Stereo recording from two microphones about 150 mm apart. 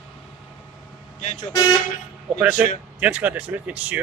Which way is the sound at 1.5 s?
30° left (ahead or behind).